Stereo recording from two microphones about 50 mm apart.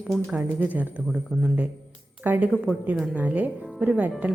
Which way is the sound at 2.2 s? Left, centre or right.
Right.